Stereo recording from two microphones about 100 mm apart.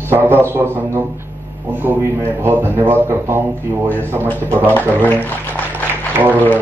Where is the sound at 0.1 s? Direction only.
20° right (ahead or behind).